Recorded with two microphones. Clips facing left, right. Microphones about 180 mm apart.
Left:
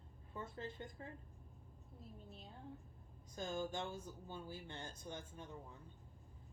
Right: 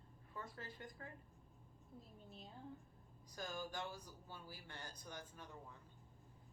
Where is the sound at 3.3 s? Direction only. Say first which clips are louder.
Left 5 dB; 25° left (ahead or behind).